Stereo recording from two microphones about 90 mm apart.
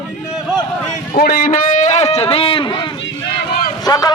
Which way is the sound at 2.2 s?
90° left.